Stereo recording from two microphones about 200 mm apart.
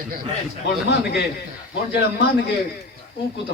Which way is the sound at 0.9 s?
50° left (ahead or behind).